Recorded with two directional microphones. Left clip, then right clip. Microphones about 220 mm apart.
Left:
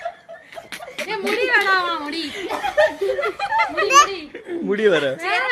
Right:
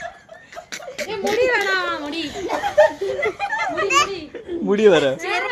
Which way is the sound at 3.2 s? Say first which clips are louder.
Left 2 dB; 30° left (ahead or behind).